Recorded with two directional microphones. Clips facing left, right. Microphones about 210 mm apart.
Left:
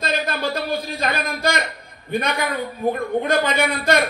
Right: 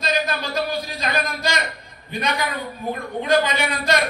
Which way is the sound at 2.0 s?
55° left (ahead or behind).